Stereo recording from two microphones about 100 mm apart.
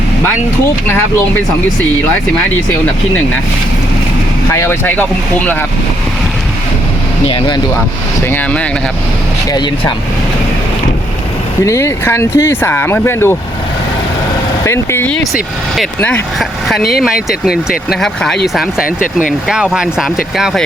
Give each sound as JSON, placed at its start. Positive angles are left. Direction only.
{"t": 4.5, "sound": "speech", "side_deg": 25}
{"t": 7.3, "sound": "speech", "side_deg": 55}
{"t": 8.3, "sound": "speech", "side_deg": 15}
{"t": 11.6, "sound": "speech", "side_deg": 30}
{"t": 14.6, "sound": "vehicle", "side_deg": 25}
{"t": 16.4, "sound": "speech", "side_deg": 0}